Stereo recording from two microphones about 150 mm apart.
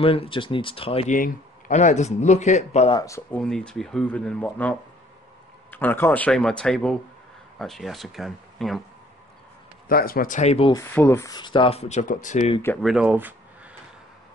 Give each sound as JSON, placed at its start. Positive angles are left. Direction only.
{"t": 0.0, "sound": "speech", "side_deg": 40}
{"t": 1.1, "sound": "speech", "side_deg": 60}
{"t": 2.9, "sound": "speech", "side_deg": 20}
{"t": 3.3, "sound": "speech", "side_deg": 5}
{"t": 9.8, "sound": "speech", "side_deg": 80}
{"t": 10.7, "sound": "speech", "side_deg": 15}
{"t": 12.8, "sound": "speech", "side_deg": -5}